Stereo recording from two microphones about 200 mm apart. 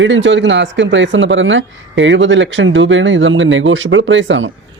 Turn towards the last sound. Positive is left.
turn(degrees=-70)  # may be behind; listen again after turning